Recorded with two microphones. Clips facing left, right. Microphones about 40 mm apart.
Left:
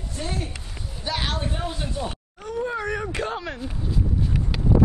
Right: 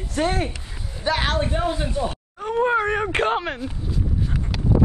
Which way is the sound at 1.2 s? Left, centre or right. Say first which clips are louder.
Right 6 dB; right.